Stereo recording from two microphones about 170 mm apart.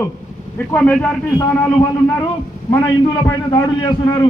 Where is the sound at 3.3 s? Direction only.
20° left (ahead or behind).